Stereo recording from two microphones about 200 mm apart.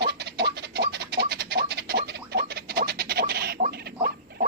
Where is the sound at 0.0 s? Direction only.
55° right (ahead or behind).